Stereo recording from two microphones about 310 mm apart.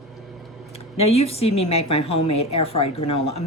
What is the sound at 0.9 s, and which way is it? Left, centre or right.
A woman's voice, centre.